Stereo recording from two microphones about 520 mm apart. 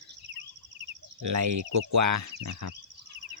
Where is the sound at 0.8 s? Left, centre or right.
Right.